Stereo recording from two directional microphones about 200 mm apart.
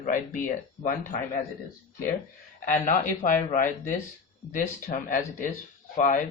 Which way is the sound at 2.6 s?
40° left (ahead or behind).